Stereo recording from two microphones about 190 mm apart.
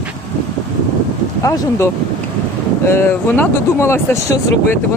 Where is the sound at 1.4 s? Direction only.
15° left (ahead or behind).